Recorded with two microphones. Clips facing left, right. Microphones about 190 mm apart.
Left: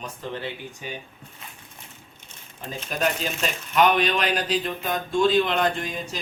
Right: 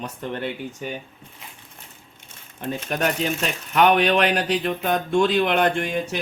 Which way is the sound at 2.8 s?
65° right (ahead or behind).